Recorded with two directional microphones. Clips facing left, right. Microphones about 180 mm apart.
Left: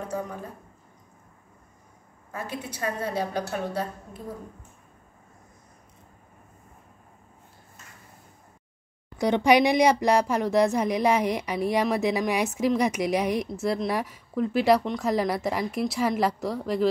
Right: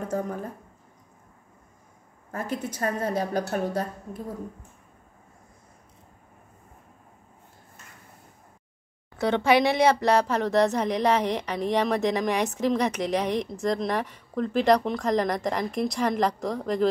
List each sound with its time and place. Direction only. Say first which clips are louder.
2.3 s a woman's voice: right 4 dB; 45° right (ahead or behind)
9.2 s speech: left 1 dB; 15° left (ahead or behind)